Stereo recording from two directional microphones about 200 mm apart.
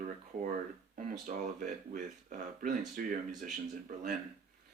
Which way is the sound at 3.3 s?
Centre (ahead or behind).